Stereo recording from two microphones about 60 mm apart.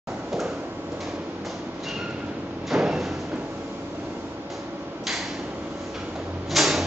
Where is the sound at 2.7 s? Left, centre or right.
Centre.